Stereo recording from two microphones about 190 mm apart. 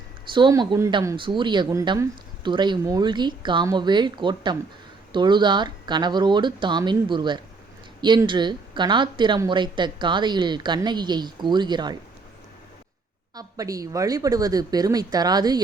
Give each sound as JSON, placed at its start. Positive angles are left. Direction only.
{"t": 0.3, "sound": "speech", "side_deg": -25}
{"t": 13.3, "sound": "speech", "side_deg": -20}